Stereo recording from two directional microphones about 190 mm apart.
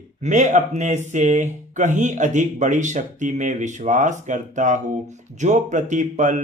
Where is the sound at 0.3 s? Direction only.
40° right (ahead or behind).